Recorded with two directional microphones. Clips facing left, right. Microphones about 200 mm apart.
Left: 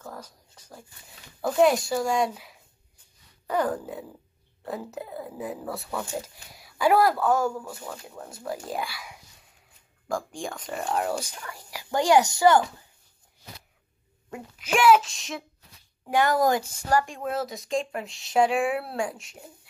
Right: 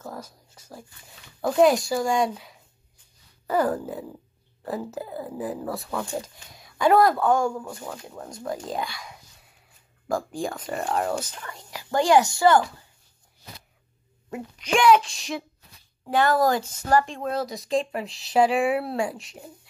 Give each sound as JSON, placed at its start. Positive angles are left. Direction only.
{"t": 0.0, "sound": "speech", "side_deg": -10}
{"t": 10.0, "sound": "speech", "side_deg": -5}
{"t": 14.6, "sound": "speech", "side_deg": 5}
{"t": 16.1, "sound": "speech", "side_deg": 15}